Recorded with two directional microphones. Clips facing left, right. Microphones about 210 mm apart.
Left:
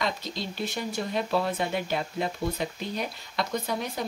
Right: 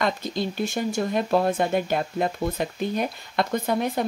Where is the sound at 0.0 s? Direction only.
50° right (ahead or behind).